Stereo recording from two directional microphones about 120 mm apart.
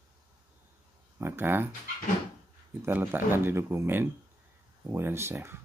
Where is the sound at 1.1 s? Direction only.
20° right (ahead or behind).